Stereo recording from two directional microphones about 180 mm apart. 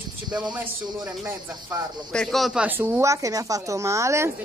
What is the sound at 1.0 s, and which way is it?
Speech, 10° right (ahead or behind).